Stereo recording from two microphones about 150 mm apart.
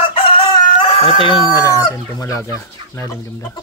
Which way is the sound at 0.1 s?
40° left (ahead or behind).